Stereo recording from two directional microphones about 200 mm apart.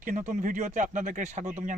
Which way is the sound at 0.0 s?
40° right (ahead or behind).